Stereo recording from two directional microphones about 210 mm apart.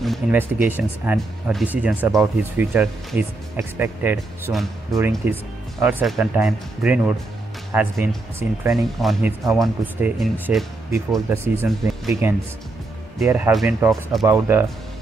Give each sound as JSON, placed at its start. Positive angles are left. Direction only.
{"t": 0.0, "sound": "speech", "side_deg": -5}
{"t": 11.1, "sound": "speech", "side_deg": -10}